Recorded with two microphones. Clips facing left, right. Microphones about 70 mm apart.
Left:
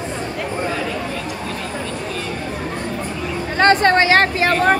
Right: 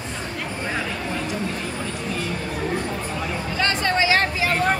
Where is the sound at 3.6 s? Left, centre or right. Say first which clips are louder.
Left 9 dB; left.